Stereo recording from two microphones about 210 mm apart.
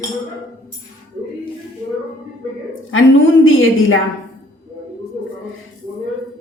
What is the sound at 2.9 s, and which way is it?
A woman's voice, 70° left (ahead or behind).